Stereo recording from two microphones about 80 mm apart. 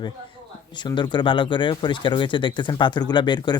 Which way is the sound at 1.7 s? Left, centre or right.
Left.